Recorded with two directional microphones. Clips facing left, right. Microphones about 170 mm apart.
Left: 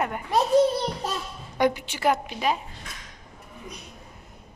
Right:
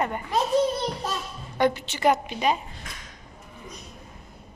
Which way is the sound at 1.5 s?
10° left (ahead or behind).